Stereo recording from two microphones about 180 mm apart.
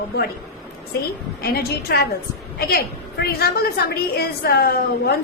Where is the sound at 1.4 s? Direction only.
60° left (ahead or behind).